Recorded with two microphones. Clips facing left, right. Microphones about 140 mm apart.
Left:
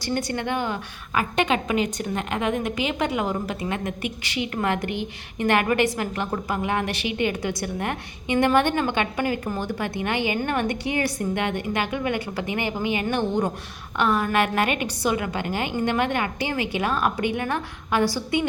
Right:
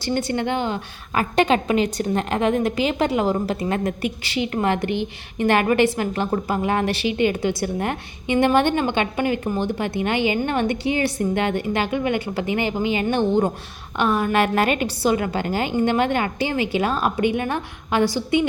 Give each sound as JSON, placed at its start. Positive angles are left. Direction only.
{"t": 0.0, "sound": "a woman's voice", "side_deg": -25}